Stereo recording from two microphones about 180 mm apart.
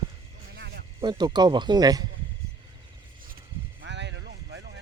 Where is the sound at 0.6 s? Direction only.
65° right (ahead or behind).